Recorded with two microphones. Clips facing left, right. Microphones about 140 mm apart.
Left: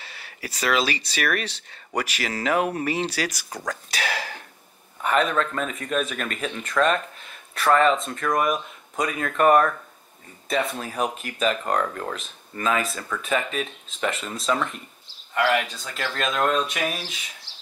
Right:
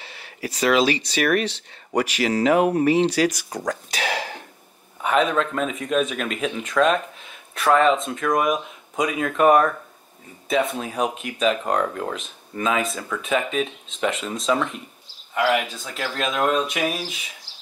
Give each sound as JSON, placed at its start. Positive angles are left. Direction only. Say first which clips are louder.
{"t": 0.0, "sound": "a sound", "louder": "right 5 dB", "side_deg": -15}
{"t": 1.0, "sound": "speech", "louder": "right 6 dB", "side_deg": -15}
{"t": 5.0, "sound": "speech", "louder": "right 2 dB", "side_deg": 0}